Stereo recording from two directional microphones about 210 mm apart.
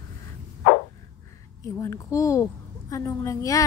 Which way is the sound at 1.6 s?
15° left (ahead or behind).